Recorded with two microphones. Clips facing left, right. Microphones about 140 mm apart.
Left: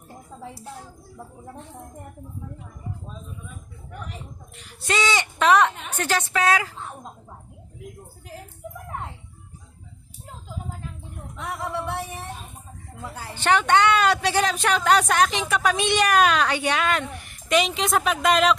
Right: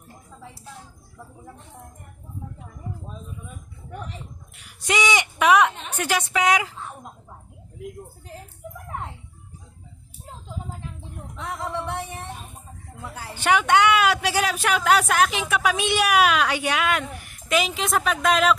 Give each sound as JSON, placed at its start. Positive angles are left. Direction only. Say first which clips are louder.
{"t": 4.6, "sound": "a woman's voice", "louder": "right 1 dB", "side_deg": -15}
{"t": 11.4, "sound": "music", "louder": "even", "side_deg": 10}
{"t": 13.0, "sound": "a woman's voice", "louder": "left 1 dB", "side_deg": 15}
{"t": 13.2, "sound": "speech", "louder": "even", "side_deg": -10}